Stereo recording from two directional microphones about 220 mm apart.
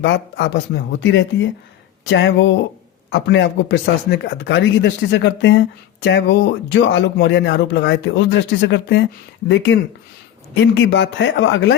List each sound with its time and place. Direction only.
0.0 s speech: 50° left (ahead or behind)